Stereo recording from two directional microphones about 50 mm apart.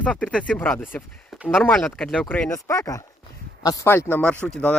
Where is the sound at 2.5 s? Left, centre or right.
Left.